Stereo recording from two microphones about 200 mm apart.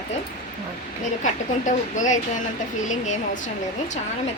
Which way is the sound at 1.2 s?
40° left (ahead or behind).